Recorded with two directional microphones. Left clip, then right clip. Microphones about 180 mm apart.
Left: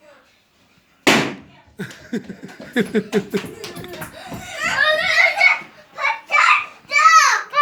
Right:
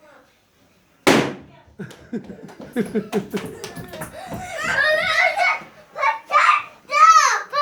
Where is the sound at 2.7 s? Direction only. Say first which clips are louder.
Left 4 dB; 20° left (ahead or behind).